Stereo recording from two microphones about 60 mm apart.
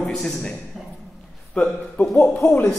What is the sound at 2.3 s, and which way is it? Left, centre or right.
Speech, left.